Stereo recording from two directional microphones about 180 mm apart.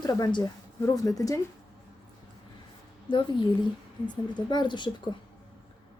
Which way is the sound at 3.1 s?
25° left (ahead or behind).